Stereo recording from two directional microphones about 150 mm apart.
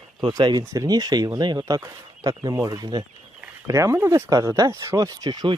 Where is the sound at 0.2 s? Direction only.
30° right (ahead or behind).